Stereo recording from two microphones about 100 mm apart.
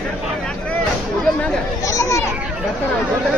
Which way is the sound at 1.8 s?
30° left (ahead or behind).